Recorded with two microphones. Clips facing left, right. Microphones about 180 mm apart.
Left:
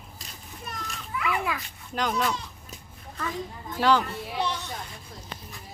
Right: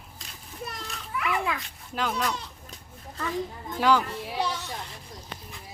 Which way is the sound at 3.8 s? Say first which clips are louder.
Even; 10° right (ahead or behind).